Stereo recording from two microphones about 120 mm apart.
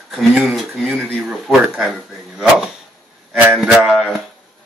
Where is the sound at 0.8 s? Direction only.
15° right (ahead or behind).